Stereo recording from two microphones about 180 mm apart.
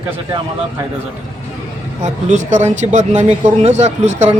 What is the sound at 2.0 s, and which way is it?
Speech, 40° right (ahead or behind).